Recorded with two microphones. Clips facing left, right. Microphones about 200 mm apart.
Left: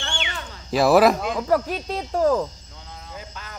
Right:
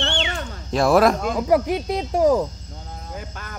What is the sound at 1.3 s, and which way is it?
Speech, 15° right (ahead or behind).